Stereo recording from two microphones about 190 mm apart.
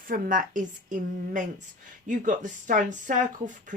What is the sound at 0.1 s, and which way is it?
Speech, 45° right (ahead or behind).